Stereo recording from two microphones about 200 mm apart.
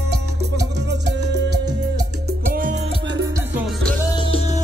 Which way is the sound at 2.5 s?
45° right (ahead or behind).